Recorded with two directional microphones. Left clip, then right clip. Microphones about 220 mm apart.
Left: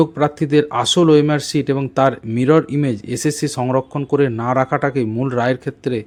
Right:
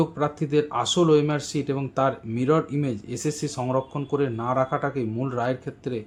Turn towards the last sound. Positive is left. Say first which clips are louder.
# left 9 dB
turn(degrees=30)  # may be behind; listen again after turning